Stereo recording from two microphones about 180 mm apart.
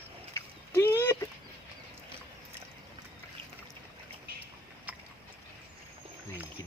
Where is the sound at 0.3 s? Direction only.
10° left (ahead or behind).